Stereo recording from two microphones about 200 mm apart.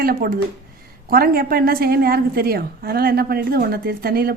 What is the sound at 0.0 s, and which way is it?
A woman's voice, 50° right (ahead or behind).